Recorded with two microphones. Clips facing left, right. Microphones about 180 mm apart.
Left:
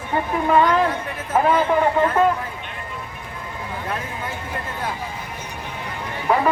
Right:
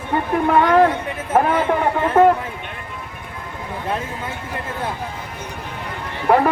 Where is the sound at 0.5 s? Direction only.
60° right (ahead or behind).